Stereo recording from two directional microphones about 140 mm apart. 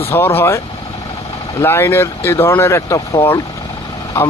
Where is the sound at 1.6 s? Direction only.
15° left (ahead or behind).